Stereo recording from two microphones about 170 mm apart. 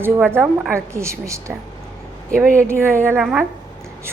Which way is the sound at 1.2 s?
15° right (ahead or behind).